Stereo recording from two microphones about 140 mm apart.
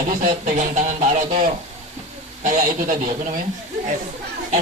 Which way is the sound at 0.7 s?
55° right (ahead or behind).